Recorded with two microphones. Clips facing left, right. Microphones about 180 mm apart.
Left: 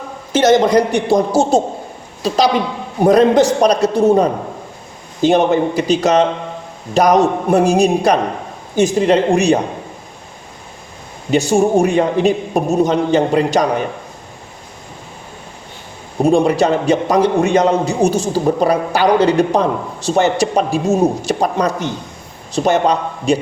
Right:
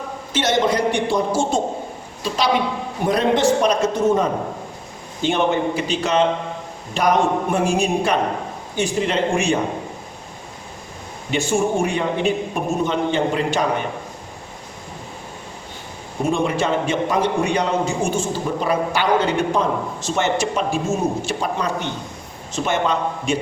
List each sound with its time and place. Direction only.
0.3 s a man's voice: 40° left (ahead or behind)
11.3 s a man's voice: 40° left (ahead or behind)
16.2 s a man's voice: 35° left (ahead or behind)